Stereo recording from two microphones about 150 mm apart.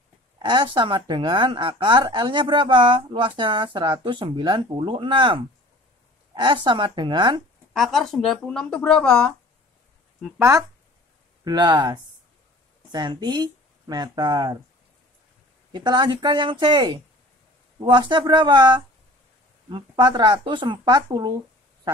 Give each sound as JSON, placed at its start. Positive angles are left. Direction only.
{"t": 0.4, "sound": "a woman's voice", "side_deg": -30}
{"t": 7.7, "sound": "speech", "side_deg": 0}
{"t": 11.4, "sound": "speech", "side_deg": -30}
{"t": 15.7, "sound": "a woman's voice", "side_deg": -30}